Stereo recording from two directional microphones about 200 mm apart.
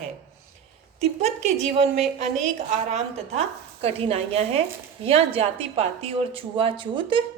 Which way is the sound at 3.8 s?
30° right (ahead or behind).